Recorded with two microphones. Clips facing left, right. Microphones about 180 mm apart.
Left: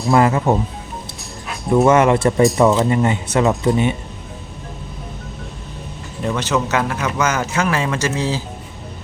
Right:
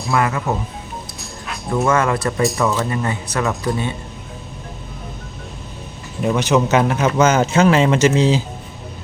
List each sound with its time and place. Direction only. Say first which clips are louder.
0.1 s speech: left 5 dB; 30° left (ahead or behind)
1.7 s speech: left 5 dB; 20° left (ahead or behind)
6.2 s speech: right 4 dB; 15° right (ahead or behind)